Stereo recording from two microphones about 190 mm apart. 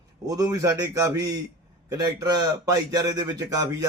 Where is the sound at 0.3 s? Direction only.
20° right (ahead or behind).